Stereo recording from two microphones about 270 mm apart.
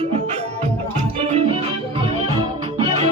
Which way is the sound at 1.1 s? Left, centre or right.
Right.